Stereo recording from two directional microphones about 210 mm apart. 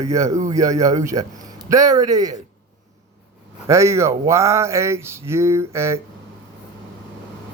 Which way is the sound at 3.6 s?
15° right (ahead or behind).